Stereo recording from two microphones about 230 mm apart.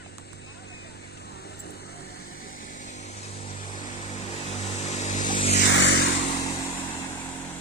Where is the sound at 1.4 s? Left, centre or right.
Left.